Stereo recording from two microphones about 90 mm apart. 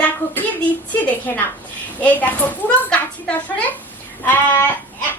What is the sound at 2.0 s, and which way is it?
A child's voice, 20° left (ahead or behind).